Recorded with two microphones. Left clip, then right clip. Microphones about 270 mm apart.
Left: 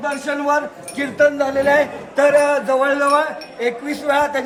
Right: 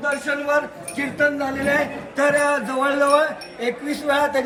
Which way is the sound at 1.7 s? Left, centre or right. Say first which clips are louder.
Left 5 dB; centre.